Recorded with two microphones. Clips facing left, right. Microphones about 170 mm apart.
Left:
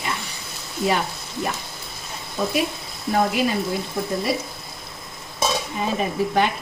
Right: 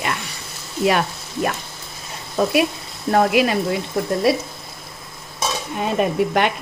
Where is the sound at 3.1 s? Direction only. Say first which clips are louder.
Right 4 dB; 70° right (ahead or behind).